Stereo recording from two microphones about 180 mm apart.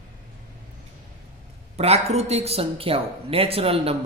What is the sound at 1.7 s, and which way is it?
Speech, 35° right (ahead or behind).